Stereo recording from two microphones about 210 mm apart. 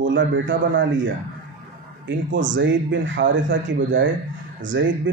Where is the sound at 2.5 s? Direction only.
60° right (ahead or behind).